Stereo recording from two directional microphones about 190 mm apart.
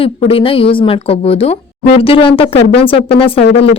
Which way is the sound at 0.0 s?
30° left (ahead or behind).